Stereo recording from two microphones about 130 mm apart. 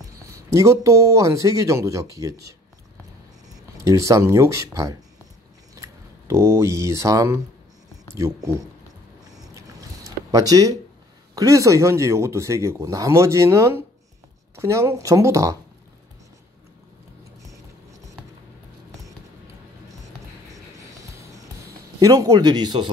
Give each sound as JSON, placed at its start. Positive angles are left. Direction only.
{"t": 0.0, "sound": "speech", "side_deg": -25}
{"t": 3.8, "sound": "speech", "side_deg": -25}
{"t": 9.2, "sound": "a sound", "side_deg": -30}
{"t": 11.3, "sound": "speech", "side_deg": -25}
{"t": 22.0, "sound": "speech", "side_deg": -30}